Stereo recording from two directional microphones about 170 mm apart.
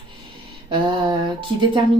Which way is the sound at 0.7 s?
25° right (ahead or behind).